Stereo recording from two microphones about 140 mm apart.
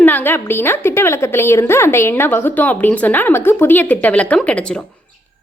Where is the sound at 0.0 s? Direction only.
15° left (ahead or behind).